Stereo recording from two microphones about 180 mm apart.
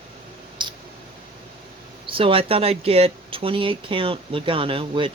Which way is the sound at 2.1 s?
30° right (ahead or behind).